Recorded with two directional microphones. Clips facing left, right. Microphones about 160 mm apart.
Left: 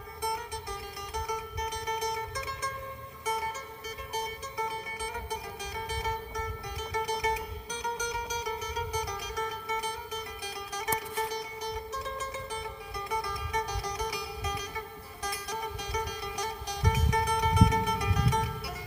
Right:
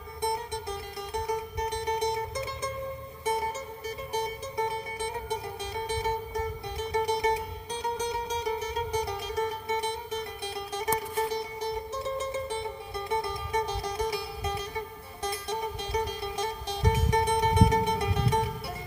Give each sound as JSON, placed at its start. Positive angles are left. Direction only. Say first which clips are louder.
{"t": 0.2, "sound": "music", "louder": "right 4 dB", "side_deg": -25}
{"t": 3.8, "sound": "music", "louder": "right 4 dB", "side_deg": -25}